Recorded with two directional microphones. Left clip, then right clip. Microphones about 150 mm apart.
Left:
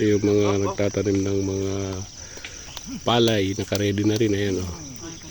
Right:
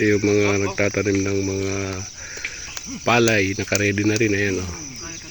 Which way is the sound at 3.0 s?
Centre (ahead or behind).